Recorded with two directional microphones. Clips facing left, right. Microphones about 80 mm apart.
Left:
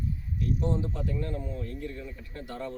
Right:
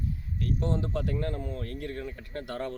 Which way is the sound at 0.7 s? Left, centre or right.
Right.